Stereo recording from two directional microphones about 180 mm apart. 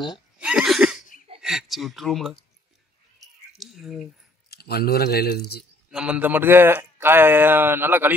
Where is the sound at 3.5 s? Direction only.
Centre (ahead or behind).